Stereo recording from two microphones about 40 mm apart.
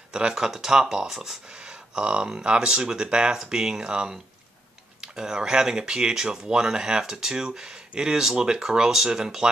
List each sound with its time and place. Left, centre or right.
0.1 s speech: centre
1.5 s speech: right